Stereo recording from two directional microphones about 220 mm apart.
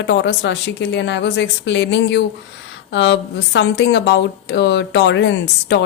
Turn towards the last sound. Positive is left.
turn(degrees=55)  # may be behind; listen again after turning